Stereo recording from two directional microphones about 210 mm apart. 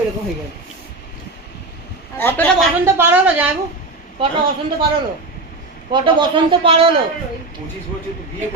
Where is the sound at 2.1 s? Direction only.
10° left (ahead or behind).